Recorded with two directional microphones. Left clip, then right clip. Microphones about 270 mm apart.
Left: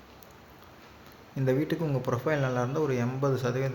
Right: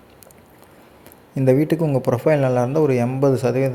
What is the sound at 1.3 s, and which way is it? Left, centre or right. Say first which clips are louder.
Speech: right 11 dB; right.